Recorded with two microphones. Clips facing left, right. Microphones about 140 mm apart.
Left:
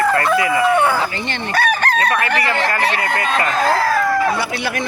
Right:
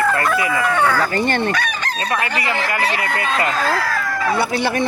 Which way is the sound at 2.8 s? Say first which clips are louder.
Left 2 dB; 30° left (ahead or behind).